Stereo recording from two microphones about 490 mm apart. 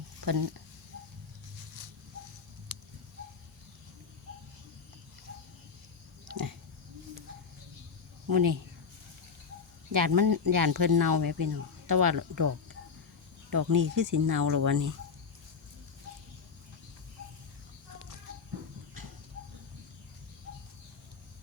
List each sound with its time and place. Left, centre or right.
0.2 s speech: right
8.3 s speech: right
9.9 s speech: right